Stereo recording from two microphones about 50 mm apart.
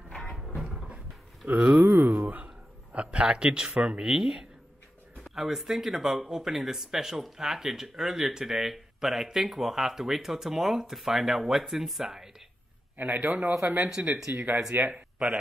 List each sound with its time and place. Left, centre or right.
1.5 s speech: right
1.8 s a sound: right; by 3.7 s centre
3.7 s speech: right
4.0 s speech: centre
12.9 s a man's voice: right
13.6 s a man's voice: right
14.9 s a man's voice: right